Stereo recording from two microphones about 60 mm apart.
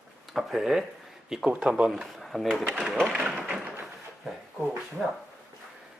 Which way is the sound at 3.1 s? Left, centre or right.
Centre.